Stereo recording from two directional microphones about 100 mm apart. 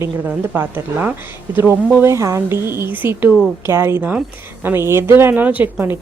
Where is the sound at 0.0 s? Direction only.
25° right (ahead or behind).